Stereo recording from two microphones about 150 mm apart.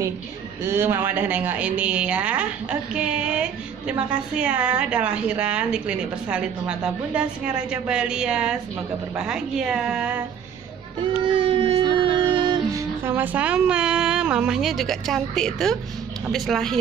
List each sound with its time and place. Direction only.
0.7 s speech: 15° right (ahead or behind)
11.2 s music: 35° right (ahead or behind)
13.0 s speech: 15° right (ahead or behind)